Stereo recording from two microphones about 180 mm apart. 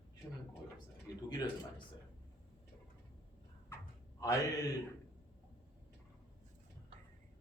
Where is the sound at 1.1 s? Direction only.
20° left (ahead or behind).